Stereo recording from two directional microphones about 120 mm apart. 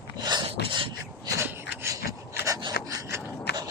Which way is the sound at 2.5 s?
35° right (ahead or behind).